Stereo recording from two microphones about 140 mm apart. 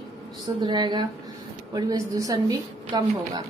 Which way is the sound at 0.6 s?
30° right (ahead or behind).